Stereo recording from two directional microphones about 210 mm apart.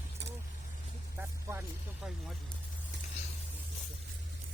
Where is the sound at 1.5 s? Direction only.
10° right (ahead or behind).